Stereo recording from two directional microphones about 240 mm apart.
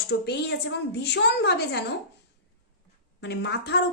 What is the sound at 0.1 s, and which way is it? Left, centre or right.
A woman's voice, left.